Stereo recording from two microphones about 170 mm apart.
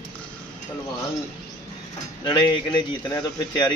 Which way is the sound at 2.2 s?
30° left (ahead or behind).